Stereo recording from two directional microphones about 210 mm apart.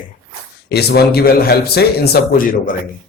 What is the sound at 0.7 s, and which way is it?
A man's voice, 50° left (ahead or behind).